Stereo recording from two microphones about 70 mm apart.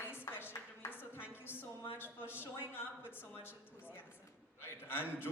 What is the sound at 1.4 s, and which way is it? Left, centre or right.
Speech, left.